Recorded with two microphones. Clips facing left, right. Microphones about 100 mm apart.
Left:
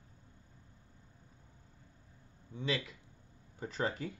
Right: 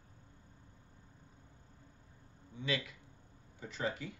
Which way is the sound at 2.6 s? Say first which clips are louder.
Left 1 dB; 30° left (ahead or behind).